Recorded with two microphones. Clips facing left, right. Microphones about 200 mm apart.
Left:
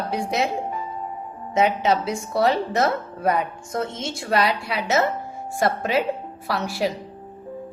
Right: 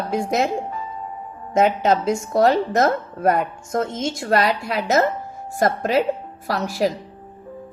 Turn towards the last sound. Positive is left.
turn(degrees=-40)  # may be behind; listen again after turning